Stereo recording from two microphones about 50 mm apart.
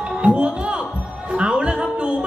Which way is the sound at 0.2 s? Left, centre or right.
Right.